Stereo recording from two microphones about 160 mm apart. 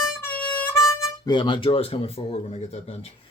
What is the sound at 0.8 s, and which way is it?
Speech, 20° left (ahead or behind).